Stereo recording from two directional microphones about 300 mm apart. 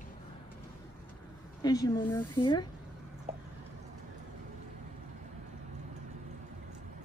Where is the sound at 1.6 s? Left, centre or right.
Centre.